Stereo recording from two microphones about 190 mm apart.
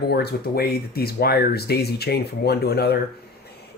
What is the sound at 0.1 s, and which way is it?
Speech, 55° left (ahead or behind).